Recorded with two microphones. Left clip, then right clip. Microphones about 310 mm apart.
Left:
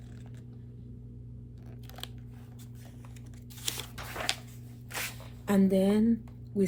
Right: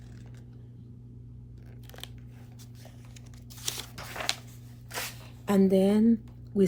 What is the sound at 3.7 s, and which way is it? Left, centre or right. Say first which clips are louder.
Scissors: right 1 dB; centre.